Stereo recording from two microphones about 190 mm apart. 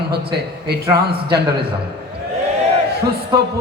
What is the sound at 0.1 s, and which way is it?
A man's voice, 60° right (ahead or behind).